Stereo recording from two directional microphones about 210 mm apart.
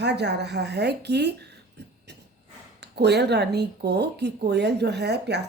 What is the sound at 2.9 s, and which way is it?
Speech, 50° right (ahead or behind).